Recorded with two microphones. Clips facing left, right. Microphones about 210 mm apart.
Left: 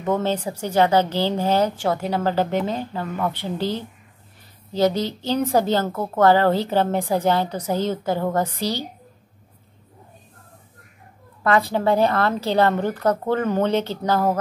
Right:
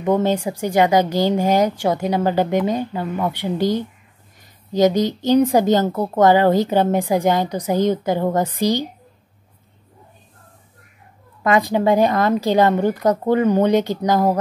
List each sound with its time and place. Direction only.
0.0 s speech: 15° right (ahead or behind)
11.4 s speech: 15° right (ahead or behind)